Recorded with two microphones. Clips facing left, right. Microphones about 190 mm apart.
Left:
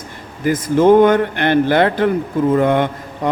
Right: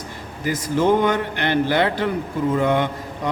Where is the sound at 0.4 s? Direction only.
50° left (ahead or behind).